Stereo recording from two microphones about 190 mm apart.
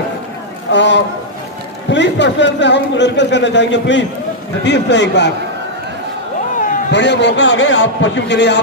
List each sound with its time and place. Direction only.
0.7 s a man's voice: 70° left (ahead or behind)
6.9 s a man's voice: 65° left (ahead or behind)